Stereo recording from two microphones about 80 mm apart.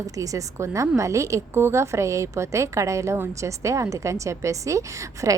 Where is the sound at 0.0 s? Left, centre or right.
Right.